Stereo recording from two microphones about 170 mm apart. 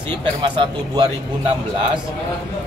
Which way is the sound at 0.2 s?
25° right (ahead or behind).